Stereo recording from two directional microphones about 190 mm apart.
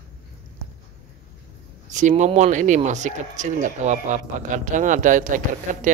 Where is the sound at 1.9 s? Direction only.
40° right (ahead or behind).